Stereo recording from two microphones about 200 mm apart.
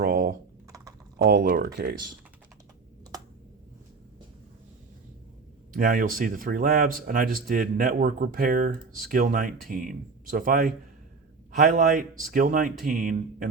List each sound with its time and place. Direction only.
0.0 s typing: 50° right (ahead or behind)
1.2 s speech: 50° right (ahead or behind)
5.7 s speech: 45° right (ahead or behind)